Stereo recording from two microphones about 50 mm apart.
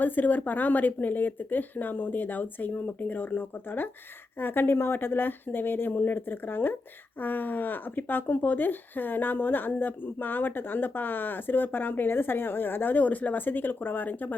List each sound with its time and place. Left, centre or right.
0.0 s speech: left